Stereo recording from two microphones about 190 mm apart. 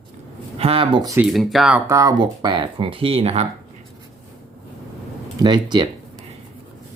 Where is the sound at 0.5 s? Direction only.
30° right (ahead or behind).